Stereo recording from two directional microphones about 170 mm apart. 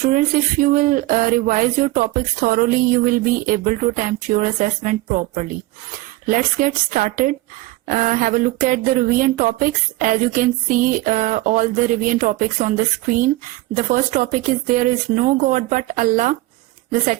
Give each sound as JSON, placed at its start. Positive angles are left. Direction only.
{"t": 0.0, "sound": "speech", "side_deg": -50}